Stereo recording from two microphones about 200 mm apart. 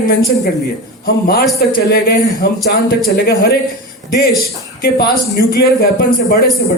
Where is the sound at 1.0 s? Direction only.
50° left (ahead or behind).